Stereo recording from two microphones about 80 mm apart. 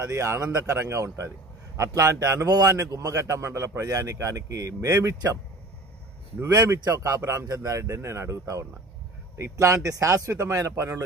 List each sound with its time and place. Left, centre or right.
0.0 s a man's voice: right
2.4 s a man's voice: right
6.4 s a man's voice: right